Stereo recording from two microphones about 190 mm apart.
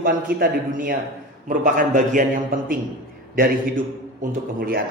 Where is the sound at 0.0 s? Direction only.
50° right (ahead or behind).